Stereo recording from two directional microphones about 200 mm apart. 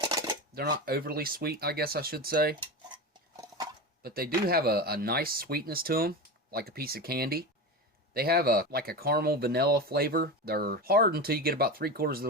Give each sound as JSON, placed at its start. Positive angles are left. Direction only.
{"t": 0.1, "sound": "a sound", "side_deg": -20}
{"t": 0.5, "sound": "speech", "side_deg": -50}
{"t": 4.0, "sound": "speech", "side_deg": -50}